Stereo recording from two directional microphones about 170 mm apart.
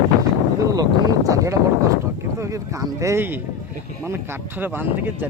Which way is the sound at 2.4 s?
20° right (ahead or behind).